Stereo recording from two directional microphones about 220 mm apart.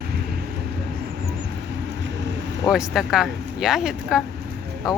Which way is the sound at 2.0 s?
55° right (ahead or behind).